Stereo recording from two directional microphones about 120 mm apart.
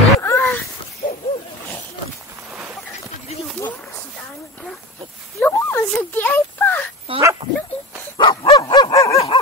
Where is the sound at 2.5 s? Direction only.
5° right (ahead or behind).